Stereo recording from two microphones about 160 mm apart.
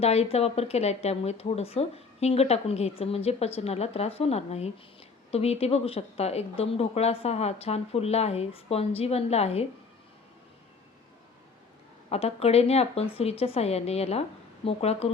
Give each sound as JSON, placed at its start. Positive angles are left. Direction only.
{"t": 0.0, "sound": "speech", "side_deg": 40}
{"t": 12.0, "sound": "speech", "side_deg": 40}